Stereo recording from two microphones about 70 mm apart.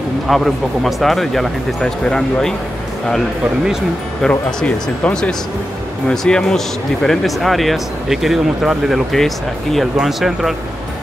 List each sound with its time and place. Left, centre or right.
0.3 s speech: centre
4.3 s speech: centre